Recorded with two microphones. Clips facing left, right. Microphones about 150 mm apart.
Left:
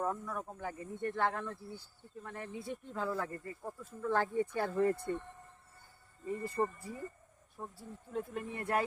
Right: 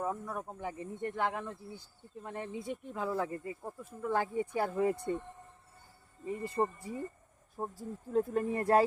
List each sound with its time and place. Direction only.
0.0 s speech: 10° right (ahead or behind)
6.2 s speech: 20° right (ahead or behind)
7.5 s speech: 40° right (ahead or behind)